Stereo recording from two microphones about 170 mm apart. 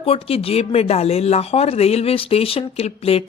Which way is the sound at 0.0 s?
35° left (ahead or behind).